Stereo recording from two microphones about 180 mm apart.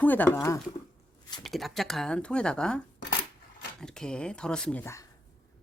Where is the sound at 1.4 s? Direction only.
Centre (ahead or behind).